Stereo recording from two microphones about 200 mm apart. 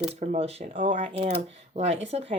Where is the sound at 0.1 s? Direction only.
35° right (ahead or behind).